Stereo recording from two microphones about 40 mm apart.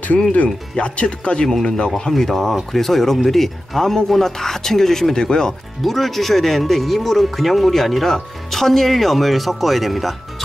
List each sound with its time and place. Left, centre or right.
0.7 s speech: left
1.5 s speech: centre
5.8 s speech: centre